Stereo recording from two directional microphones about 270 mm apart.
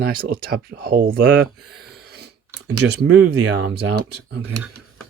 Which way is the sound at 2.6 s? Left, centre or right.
Right.